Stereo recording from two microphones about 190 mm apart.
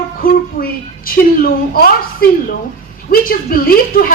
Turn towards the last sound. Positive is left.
turn(degrees=50)  # may be behind; listen again after turning